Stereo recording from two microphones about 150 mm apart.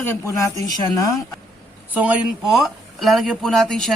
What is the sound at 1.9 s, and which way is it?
Speech, 10° right (ahead or behind).